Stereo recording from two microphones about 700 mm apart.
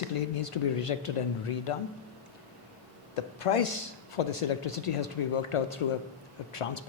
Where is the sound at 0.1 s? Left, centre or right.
Left.